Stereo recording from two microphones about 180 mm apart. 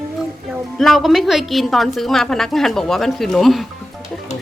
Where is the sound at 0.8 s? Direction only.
Centre (ahead or behind).